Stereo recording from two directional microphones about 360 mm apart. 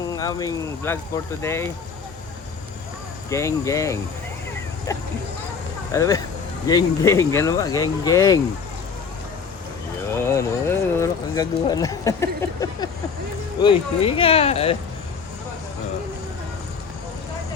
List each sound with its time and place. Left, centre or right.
0.1 s speech: centre
3.2 s speech: centre
10.3 s speech: centre